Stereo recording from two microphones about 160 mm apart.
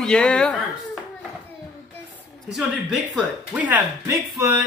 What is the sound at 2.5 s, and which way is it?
Speech, centre (ahead or behind).